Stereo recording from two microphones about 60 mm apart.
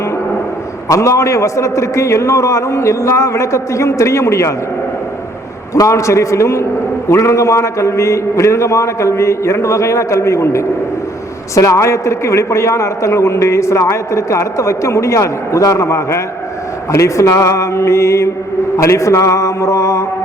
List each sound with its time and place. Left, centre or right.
0.9 s a man's voice: left
5.9 s a man's voice: left